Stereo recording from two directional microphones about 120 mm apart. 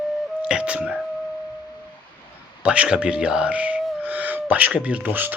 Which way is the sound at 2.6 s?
10° right (ahead or behind).